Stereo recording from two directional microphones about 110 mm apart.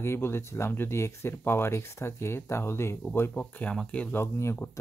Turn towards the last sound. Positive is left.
turn(degrees=25)  # may be behind; listen again after turning